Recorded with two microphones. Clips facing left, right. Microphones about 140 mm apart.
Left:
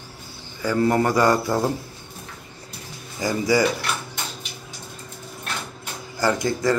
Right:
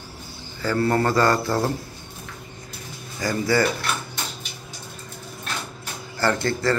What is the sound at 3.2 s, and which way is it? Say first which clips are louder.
Speech: left 1 dB; 15° left (ahead or behind).